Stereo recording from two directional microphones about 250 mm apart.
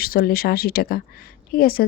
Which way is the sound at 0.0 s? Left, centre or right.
Left.